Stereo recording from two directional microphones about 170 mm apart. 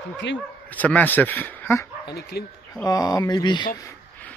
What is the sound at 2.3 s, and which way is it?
Speech, 70° left (ahead or behind).